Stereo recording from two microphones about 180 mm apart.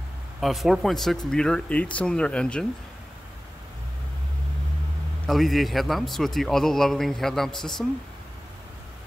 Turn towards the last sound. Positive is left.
turn(degrees=0)  # may be behind; listen again after turning